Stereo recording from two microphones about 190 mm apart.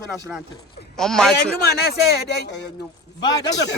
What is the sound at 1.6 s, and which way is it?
Speech, 55° left (ahead or behind).